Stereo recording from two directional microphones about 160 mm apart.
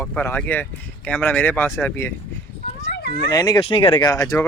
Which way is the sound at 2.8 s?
90° left.